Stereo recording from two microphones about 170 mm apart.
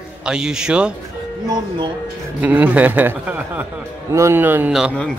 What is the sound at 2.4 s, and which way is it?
A man's voice, 10° right (ahead or behind).